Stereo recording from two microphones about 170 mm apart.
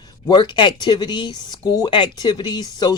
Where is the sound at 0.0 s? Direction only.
25° left (ahead or behind).